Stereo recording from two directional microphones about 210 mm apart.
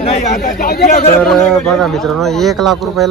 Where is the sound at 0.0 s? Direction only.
30° left (ahead or behind).